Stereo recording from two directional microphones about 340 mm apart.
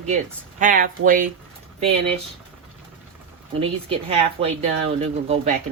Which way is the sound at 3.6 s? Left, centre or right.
Centre.